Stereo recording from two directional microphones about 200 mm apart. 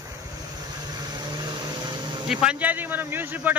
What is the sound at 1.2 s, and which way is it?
Vehicle, 20° right (ahead or behind).